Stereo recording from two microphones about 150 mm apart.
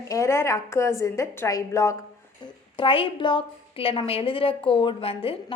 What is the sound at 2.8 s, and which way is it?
A woman's voice, 35° left (ahead or behind).